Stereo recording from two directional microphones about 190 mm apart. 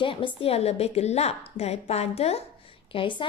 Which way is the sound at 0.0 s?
25° left (ahead or behind).